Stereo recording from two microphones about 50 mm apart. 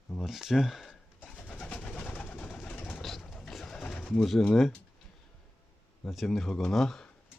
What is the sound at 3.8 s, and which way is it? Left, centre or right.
Pigeon, centre.